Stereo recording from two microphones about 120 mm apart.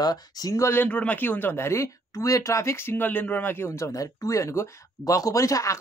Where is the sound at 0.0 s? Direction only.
35° left (ahead or behind).